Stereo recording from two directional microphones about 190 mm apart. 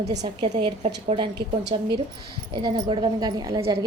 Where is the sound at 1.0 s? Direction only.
25° right (ahead or behind).